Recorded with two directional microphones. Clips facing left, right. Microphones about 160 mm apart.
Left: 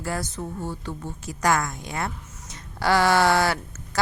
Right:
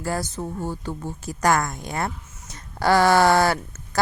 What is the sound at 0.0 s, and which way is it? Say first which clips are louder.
A woman's voice: right 3 dB; 35° right (ahead or behind).